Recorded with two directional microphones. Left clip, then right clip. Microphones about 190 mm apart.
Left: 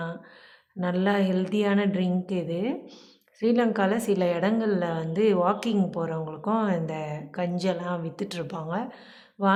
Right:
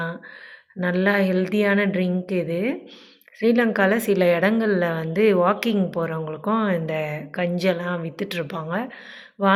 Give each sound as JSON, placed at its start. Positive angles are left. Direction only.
{"t": 0.8, "sound": "a woman's voice", "side_deg": -5}